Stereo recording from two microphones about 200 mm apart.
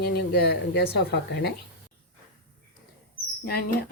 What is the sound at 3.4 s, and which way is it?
Speech, 50° left (ahead or behind).